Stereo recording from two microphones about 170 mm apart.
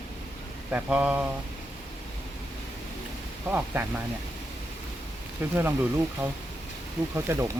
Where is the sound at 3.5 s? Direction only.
10° right (ahead or behind).